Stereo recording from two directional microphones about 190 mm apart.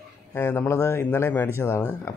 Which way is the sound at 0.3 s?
10° left (ahead or behind).